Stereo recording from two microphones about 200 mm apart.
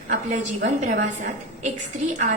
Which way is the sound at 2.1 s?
40° right (ahead or behind).